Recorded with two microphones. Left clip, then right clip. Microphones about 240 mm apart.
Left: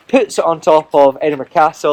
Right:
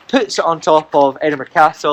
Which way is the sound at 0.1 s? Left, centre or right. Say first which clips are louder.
Left 2 dB; left.